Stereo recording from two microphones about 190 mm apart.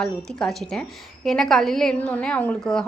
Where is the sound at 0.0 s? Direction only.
5° left (ahead or behind).